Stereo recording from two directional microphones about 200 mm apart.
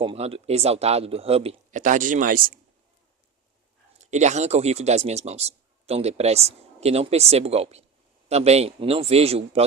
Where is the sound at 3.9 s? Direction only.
35° right (ahead or behind).